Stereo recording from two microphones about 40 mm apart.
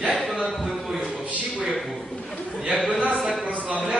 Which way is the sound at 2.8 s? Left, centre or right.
Right.